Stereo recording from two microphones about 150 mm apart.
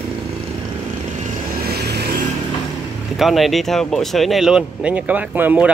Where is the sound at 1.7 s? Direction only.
90° right.